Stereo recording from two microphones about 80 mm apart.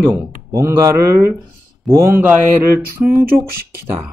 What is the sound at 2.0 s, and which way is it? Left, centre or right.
Speech, right.